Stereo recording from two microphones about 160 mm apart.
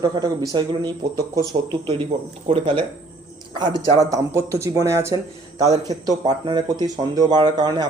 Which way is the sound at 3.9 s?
20° right (ahead or behind).